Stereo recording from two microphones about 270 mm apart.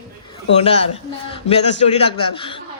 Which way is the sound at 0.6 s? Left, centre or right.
Left.